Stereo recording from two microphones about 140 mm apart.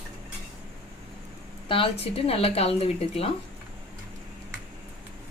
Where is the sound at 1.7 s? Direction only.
40° left (ahead or behind).